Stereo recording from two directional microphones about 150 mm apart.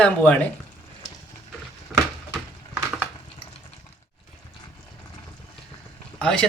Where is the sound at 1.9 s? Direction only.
5° right (ahead or behind).